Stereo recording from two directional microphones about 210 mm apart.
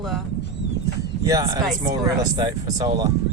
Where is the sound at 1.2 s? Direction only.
15° right (ahead or behind).